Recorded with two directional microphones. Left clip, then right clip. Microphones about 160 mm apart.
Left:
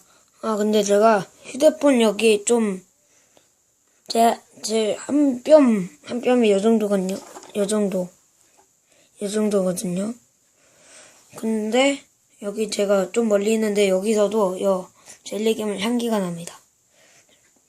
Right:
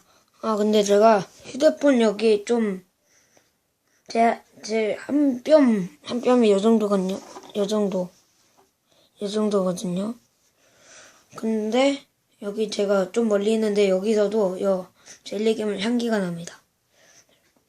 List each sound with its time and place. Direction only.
0.1 s a woman's voice: 5° left (ahead or behind); by 2.7 s 25° left (ahead or behind)
4.0 s speech: 20° left (ahead or behind)
6.0 s speech: 5° left (ahead or behind)